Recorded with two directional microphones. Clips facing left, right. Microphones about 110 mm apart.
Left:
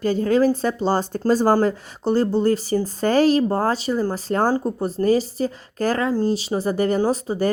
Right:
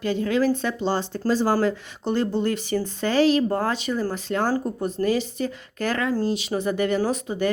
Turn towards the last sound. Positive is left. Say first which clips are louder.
# left 3 dB
turn(degrees=35)  # may be behind; listen again after turning